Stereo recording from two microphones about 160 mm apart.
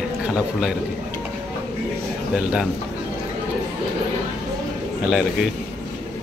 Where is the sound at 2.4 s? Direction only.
5° right (ahead or behind).